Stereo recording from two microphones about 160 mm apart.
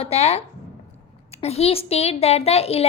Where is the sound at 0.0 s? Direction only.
40° left (ahead or behind).